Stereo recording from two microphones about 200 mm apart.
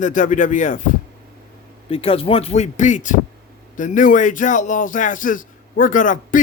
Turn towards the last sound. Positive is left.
turn(degrees=40)  # may be behind; listen again after turning